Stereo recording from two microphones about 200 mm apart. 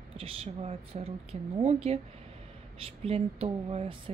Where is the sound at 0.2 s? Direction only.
30° right (ahead or behind).